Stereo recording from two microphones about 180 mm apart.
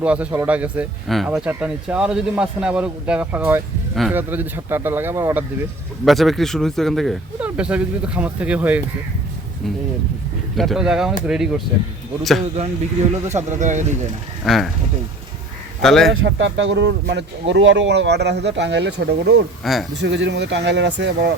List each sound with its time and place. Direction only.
0.0 s speech: 5° right (ahead or behind)
6.1 s speech: centre (ahead or behind)
10.6 s speech: centre (ahead or behind)
12.5 s speech: 35° right (ahead or behind)
14.4 s speech: centre (ahead or behind)
15.8 s speech: centre (ahead or behind)
16.2 s speech: 85° right; by 19.4 s 70° right (ahead or behind)
19.6 s speech: centre (ahead or behind)
19.9 s speech: 75° right (ahead or behind)